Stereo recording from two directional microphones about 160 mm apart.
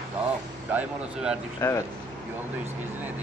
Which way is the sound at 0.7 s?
10° right (ahead or behind).